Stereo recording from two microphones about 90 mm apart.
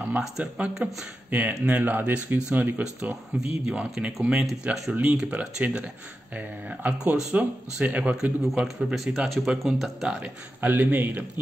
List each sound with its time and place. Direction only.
0.4 s speech: 10° right (ahead or behind)
10.2 s a man's voice: 20° right (ahead or behind)